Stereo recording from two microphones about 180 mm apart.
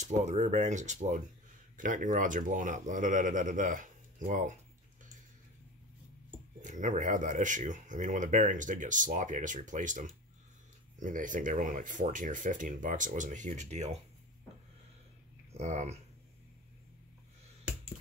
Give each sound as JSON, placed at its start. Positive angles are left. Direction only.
{"t": 0.0, "sound": "speech", "side_deg": -40}
{"t": 6.6, "sound": "speech", "side_deg": -45}
{"t": 15.5, "sound": "speech", "side_deg": -40}